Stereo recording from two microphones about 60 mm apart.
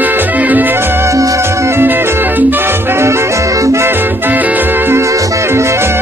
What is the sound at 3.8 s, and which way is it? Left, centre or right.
Music, right.